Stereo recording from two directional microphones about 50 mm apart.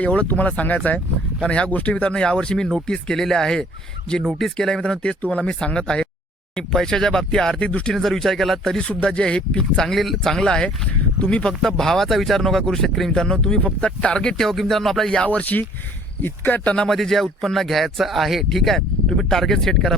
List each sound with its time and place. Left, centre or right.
0.0 s speech: left
7.9 s speech: centre
8.8 s speech: left
9.9 s speech: centre
11.2 s speech: left
11.6 s speech: centre
15.2 s speech: left
16.2 s speech: left
16.6 s speech: centre
16.9 s speech: centre